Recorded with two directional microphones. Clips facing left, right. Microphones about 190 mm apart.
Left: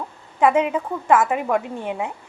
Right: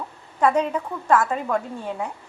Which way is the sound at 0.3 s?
15° left (ahead or behind).